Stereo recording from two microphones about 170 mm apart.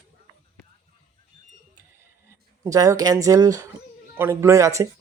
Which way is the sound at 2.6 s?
20° right (ahead or behind).